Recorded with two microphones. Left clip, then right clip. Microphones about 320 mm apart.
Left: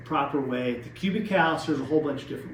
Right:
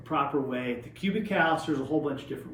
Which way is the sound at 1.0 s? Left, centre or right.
Centre.